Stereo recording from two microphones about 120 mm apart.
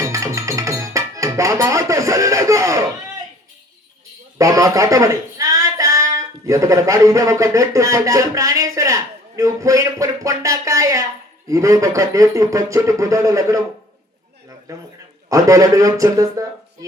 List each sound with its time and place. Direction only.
0.0 s music: 25° right (ahead or behind)
4.4 s speech: 30° right (ahead or behind)
14.7 s speech: 25° right (ahead or behind)